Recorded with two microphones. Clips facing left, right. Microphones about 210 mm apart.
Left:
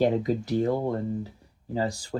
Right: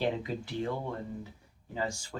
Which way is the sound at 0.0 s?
40° left (ahead or behind).